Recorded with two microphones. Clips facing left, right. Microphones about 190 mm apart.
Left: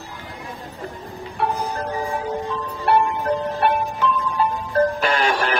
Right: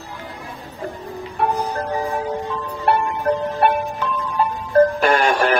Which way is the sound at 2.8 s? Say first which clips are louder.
Left 1 dB; 55° right (ahead or behind).